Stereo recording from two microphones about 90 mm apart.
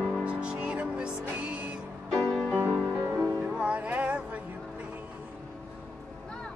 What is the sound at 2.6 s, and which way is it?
Music, 20° right (ahead or behind).